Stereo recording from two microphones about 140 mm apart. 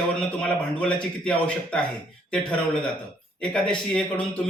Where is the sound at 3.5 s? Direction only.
5° left (ahead or behind).